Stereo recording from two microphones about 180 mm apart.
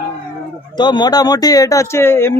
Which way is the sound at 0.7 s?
25° left (ahead or behind).